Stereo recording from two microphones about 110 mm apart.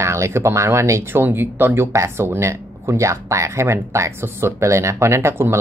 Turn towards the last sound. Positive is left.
turn(degrees=-25)  # may be behind; listen again after turning